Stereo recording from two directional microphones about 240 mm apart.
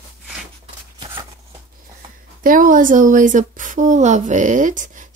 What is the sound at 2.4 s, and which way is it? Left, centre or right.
A woman's voice, right.